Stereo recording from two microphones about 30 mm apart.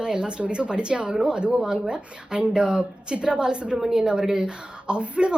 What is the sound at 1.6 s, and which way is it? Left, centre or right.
Speech, right.